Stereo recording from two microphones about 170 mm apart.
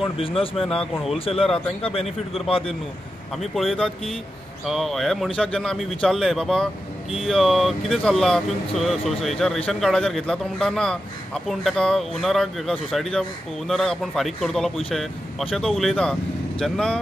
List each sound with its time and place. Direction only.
0.0 s speech: 35° left (ahead or behind)
3.3 s speech: centre (ahead or behind)